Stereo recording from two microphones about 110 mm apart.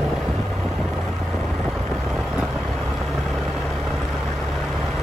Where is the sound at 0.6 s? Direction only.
Centre (ahead or behind).